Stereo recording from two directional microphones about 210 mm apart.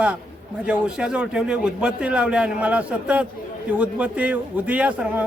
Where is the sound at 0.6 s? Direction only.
5° right (ahead or behind).